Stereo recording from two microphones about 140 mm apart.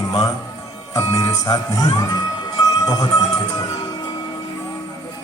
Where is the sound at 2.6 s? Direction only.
25° left (ahead or behind).